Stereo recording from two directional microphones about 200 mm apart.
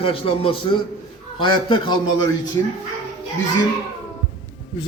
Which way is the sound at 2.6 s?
15° left (ahead or behind).